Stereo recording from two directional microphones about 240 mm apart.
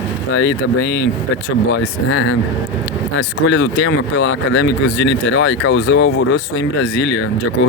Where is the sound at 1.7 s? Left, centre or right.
Left.